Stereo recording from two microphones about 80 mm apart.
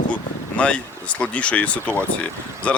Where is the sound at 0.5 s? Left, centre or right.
Centre.